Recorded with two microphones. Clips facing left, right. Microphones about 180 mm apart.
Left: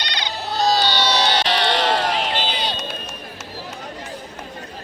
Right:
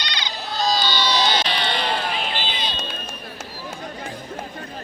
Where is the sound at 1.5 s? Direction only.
80° left.